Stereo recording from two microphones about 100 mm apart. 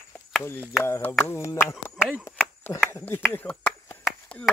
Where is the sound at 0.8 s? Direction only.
25° left (ahead or behind).